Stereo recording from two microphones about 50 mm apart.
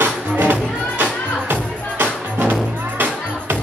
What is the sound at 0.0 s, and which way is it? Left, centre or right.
Music, right.